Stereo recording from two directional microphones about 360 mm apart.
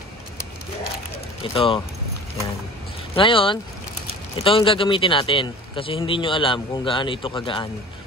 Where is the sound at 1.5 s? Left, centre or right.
Centre.